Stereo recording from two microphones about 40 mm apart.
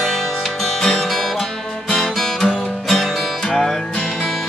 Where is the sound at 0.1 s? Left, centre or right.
Centre.